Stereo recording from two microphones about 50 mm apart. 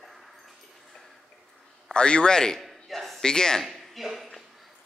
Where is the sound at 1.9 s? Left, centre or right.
Centre.